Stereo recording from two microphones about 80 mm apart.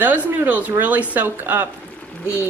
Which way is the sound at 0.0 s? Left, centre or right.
Right.